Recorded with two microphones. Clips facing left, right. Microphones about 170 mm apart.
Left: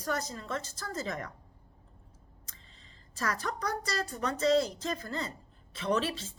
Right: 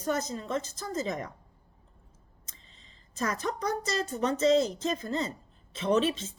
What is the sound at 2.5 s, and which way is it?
A woman's voice, 20° right (ahead or behind).